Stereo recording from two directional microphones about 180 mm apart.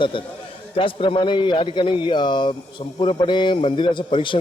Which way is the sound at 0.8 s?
30° left (ahead or behind).